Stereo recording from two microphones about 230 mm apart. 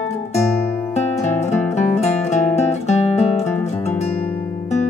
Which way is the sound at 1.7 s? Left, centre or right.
Left.